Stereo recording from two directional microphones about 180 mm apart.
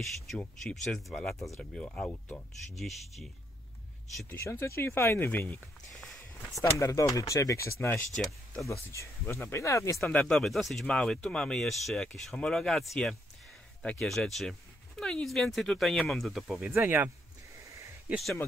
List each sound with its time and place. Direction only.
0.0 s speech: 5° left (ahead or behind)
4.3 s speech: 15° left (ahead or behind)
8.9 s speech: 15° left (ahead or behind)
9.9 s speech: 5° left (ahead or behind)
16.7 s speech: 10° right (ahead or behind)
17.7 s a sound: 15° right (ahead or behind)
18.1 s speech: centre (ahead or behind)